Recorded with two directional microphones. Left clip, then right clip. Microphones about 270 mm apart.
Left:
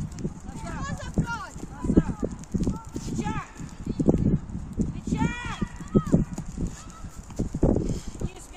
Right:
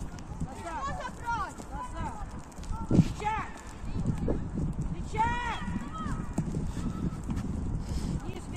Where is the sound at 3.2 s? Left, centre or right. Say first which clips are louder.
Right 1 dB; left.